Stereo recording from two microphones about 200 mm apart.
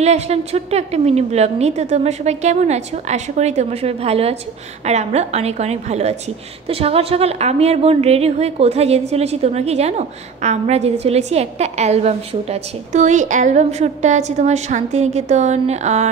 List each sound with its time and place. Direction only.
0.0 s a woman's voice: 30° right (ahead or behind)